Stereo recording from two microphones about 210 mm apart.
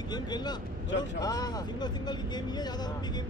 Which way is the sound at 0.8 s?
55° left (ahead or behind).